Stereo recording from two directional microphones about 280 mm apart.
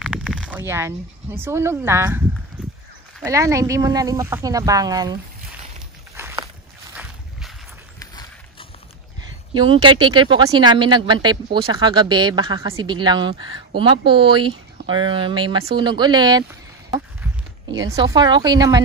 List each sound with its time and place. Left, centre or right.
0.0 s speech: centre
3.3 s speech: centre
6.1 s walk: centre
6.9 s a sound: centre
8.0 s clip-clop: centre
9.6 s speech: centre